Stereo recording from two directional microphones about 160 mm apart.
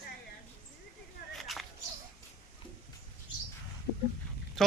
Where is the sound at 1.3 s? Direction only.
Centre (ahead or behind).